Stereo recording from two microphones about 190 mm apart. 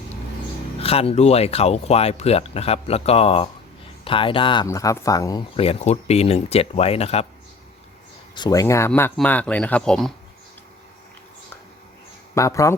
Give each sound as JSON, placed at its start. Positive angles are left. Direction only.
{"t": 0.8, "sound": "speech", "side_deg": 30}
{"t": 5.6, "sound": "speech", "side_deg": 35}
{"t": 8.4, "sound": "speech", "side_deg": 20}
{"t": 12.3, "sound": "speech", "side_deg": 15}